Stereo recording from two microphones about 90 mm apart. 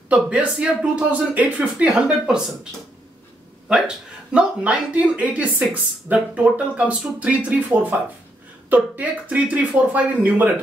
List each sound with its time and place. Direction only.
0.1 s speech: 10° right (ahead or behind)
3.6 s speech: 10° right (ahead or behind)